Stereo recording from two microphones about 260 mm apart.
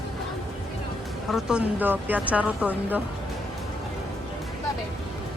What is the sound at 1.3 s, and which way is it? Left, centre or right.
Speech, centre.